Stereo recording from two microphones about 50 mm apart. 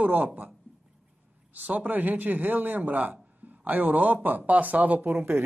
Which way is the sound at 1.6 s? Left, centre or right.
Right.